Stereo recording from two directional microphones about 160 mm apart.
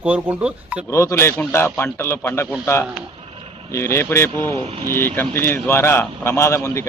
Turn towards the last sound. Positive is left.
turn(degrees=15)  # may be behind; listen again after turning